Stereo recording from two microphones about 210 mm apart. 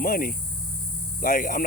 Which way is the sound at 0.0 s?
45° left (ahead or behind).